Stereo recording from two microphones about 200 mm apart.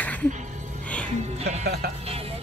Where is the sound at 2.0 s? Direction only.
30° right (ahead or behind).